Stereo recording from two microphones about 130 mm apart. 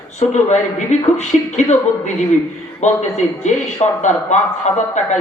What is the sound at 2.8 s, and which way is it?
A man's voice, 65° left (ahead or behind).